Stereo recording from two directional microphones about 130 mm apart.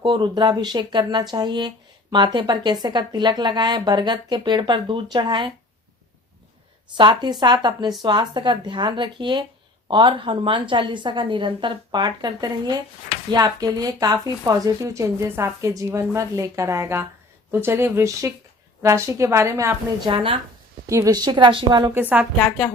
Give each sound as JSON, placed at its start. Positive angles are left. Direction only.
{"t": 0.0, "sound": "speech", "side_deg": -35}
{"t": 7.0, "sound": "a woman's voice", "side_deg": -35}
{"t": 20.1, "sound": "speech", "side_deg": -40}
{"t": 20.8, "sound": "speech", "side_deg": -25}